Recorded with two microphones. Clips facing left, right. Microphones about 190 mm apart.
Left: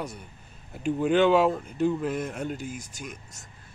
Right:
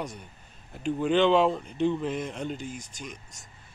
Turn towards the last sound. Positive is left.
turn(degrees=5)  # may be behind; listen again after turning